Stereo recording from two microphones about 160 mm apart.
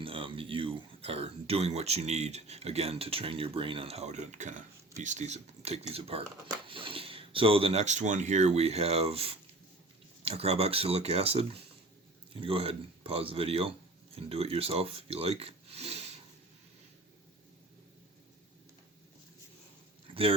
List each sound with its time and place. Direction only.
0.0 s speech: 35° right (ahead or behind)
20.1 s dog: 30° right (ahead or behind)